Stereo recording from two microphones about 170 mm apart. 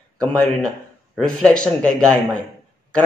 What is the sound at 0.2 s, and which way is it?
A man's voice, 5° left (ahead or behind).